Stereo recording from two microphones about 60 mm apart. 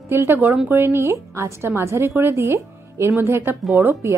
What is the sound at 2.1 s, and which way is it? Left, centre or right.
Speech, right.